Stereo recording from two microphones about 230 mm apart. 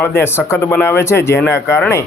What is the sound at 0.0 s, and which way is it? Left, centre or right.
Speech, centre.